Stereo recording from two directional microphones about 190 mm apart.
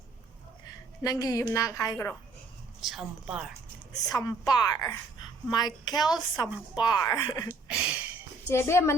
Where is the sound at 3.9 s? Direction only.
20° left (ahead or behind).